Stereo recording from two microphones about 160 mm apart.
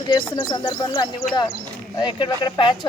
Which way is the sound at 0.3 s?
30° left (ahead or behind).